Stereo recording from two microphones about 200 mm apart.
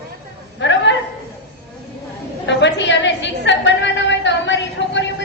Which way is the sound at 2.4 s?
60° left (ahead or behind).